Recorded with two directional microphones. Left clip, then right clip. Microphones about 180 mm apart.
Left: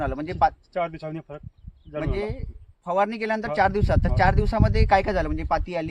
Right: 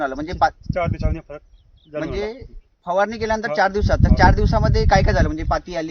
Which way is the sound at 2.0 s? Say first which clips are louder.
Right 3 dB; 25° left (ahead or behind).